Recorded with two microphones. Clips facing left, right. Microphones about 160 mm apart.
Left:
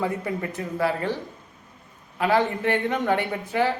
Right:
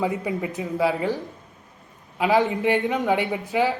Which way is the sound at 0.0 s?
15° right (ahead or behind).